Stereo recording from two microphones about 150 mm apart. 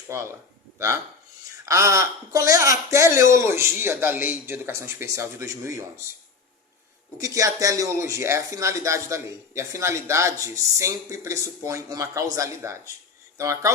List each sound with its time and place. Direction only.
0.1 s speech: 20° right (ahead or behind)
1.6 s speech: 20° right (ahead or behind)
7.2 s speech: 20° right (ahead or behind)